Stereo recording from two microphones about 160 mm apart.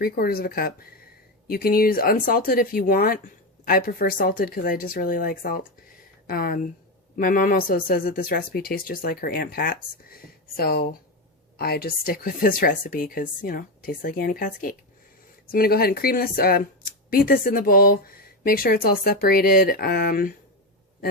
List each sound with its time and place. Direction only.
0.0 s speech: 70° left (ahead or behind)